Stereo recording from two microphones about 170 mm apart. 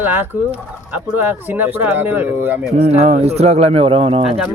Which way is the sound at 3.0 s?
40° right (ahead or behind).